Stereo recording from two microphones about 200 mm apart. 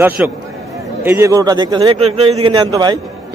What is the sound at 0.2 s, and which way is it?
A man's voice, 5° right (ahead or behind).